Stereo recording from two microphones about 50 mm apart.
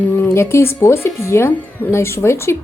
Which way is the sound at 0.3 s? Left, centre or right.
Left.